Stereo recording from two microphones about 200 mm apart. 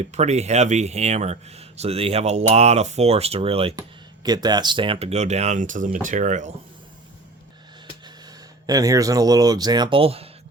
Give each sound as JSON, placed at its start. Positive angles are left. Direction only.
{"t": 0.1, "sound": "speech", "side_deg": -35}
{"t": 8.6, "sound": "speech", "side_deg": -15}